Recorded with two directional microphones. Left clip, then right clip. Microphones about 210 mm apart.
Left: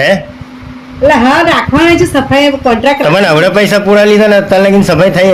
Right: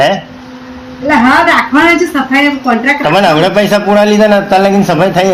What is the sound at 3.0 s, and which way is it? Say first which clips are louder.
A man's voice: right 1 dB; 45° left (ahead or behind).